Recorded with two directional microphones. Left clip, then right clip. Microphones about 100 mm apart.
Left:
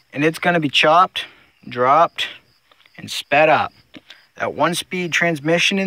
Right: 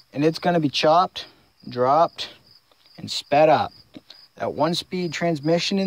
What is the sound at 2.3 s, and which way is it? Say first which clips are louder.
Cricket: left 6 dB; 20° right (ahead or behind).